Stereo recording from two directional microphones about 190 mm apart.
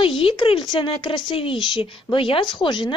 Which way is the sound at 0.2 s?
30° left (ahead or behind).